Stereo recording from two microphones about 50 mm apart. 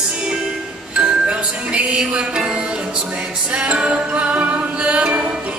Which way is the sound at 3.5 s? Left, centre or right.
Right.